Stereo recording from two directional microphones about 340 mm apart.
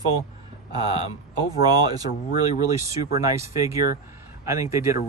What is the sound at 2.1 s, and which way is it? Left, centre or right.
Speech, left.